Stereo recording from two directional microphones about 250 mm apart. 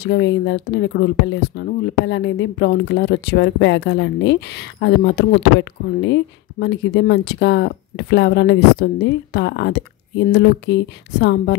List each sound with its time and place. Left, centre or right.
0.0 s speech: left